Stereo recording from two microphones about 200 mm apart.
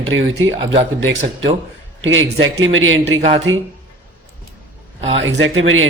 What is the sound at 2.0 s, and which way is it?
A man's voice, 75° right (ahead or behind).